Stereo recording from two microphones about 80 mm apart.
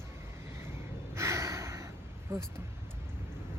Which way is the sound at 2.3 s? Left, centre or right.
Right.